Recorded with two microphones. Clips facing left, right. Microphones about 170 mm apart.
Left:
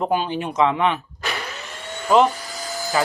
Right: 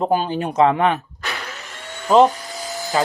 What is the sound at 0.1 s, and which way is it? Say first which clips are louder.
Speech: right 2 dB; 40° right (ahead or behind).